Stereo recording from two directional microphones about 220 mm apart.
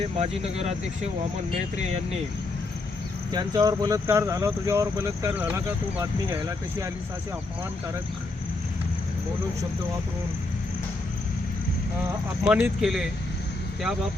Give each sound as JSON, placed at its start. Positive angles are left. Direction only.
{"t": 0.2, "sound": "speech", "side_deg": -30}
{"t": 3.3, "sound": "speech", "side_deg": -20}
{"t": 12.5, "sound": "speech", "side_deg": -5}